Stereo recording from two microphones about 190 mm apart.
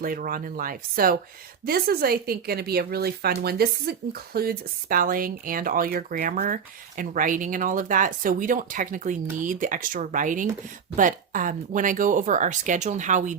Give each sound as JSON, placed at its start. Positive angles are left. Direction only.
{"t": 0.0, "sound": "speech", "side_deg": -50}